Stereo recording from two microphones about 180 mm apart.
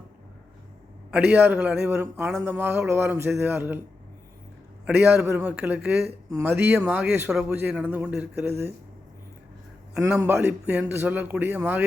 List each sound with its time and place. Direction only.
1.1 s a man's voice: 10° right (ahead or behind)
2.1 s a man's voice: 5° right (ahead or behind)
4.9 s a man's voice: 10° right (ahead or behind)
10.0 s a man's voice: 10° right (ahead or behind)